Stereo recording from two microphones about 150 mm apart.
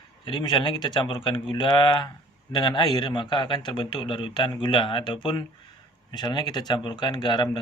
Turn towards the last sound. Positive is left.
turn(degrees=30)  # may be behind; listen again after turning